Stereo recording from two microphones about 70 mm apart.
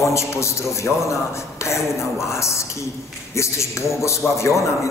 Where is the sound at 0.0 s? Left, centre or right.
Left.